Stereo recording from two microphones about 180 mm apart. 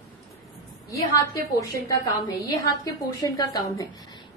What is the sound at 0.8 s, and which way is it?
A woman's voice, 20° left (ahead or behind).